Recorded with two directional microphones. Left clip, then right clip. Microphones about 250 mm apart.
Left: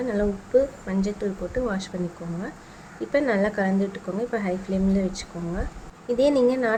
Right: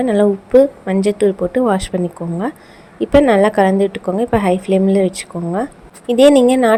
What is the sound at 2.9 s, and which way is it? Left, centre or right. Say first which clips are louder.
A woman's voice: right 12 dB; right.